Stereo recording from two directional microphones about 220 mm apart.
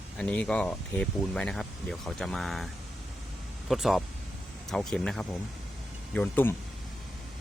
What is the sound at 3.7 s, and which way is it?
Speech, centre (ahead or behind).